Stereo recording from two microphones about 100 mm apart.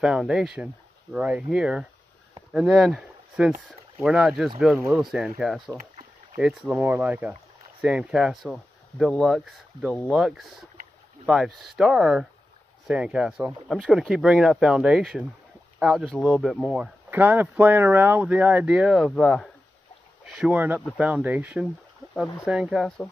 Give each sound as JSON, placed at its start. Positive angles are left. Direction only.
{"t": 0.0, "sound": "speech", "side_deg": -5}
{"t": 9.1, "sound": "speech", "side_deg": 5}
{"t": 9.4, "sound": "speech", "side_deg": -5}
{"t": 16.3, "sound": "speech", "side_deg": 0}
{"t": 17.1, "sound": "speech", "side_deg": -20}
{"t": 20.5, "sound": "speech", "side_deg": -20}